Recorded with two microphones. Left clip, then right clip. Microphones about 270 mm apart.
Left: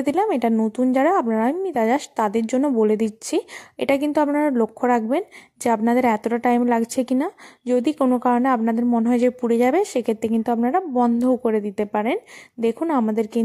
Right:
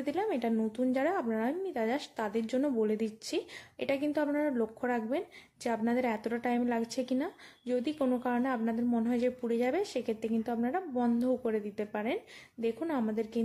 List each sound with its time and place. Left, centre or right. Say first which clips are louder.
0.0 s speech: left 12 dB; left